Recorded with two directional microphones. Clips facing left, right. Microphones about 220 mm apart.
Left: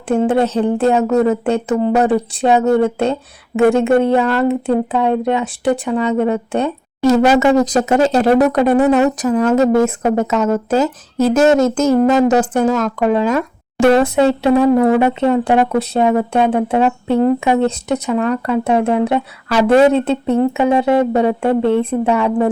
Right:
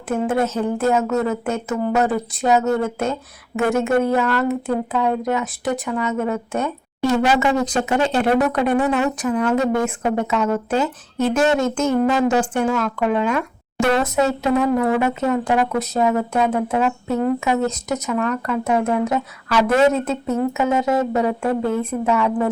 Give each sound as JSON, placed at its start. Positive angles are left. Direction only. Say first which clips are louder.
{"t": 0.1, "sound": "speech", "louder": "left 6 dB", "side_deg": 30}